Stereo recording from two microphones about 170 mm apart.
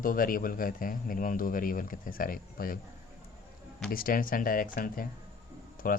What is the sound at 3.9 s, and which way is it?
A man's voice, 60° left (ahead or behind).